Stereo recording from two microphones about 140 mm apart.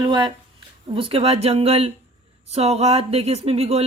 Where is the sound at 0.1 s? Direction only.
35° right (ahead or behind).